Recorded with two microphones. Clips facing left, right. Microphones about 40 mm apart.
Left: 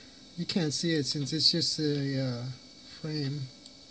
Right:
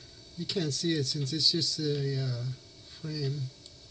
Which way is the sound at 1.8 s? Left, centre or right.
Left.